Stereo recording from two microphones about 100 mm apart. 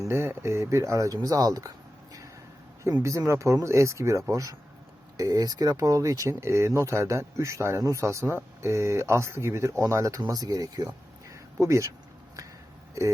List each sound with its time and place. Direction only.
0.0 s speech: 25° right (ahead or behind)
3.0 s speech: 30° right (ahead or behind)